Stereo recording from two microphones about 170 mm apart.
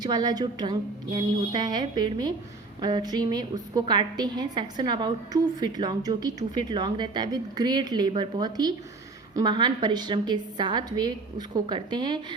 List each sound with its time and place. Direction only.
0.0 s a woman's voice: 25° right (ahead or behind)